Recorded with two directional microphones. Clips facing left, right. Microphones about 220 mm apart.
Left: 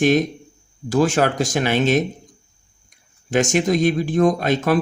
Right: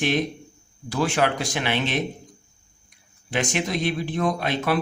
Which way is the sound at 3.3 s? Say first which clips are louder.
Left 8 dB; 45° left (ahead or behind).